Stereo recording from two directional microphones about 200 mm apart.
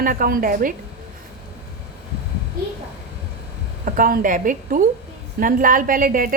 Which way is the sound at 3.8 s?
45° right (ahead or behind).